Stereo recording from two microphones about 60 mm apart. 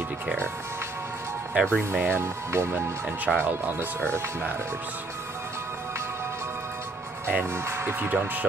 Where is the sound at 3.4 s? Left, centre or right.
Right.